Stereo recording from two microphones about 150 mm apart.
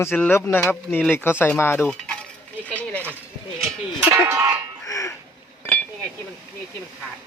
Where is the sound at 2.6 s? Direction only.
10° left (ahead or behind).